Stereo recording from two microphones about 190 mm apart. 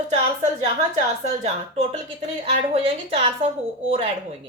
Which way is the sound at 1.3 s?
35° right (ahead or behind).